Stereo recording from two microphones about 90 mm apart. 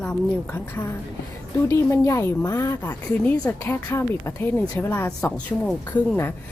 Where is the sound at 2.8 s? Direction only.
15° left (ahead or behind).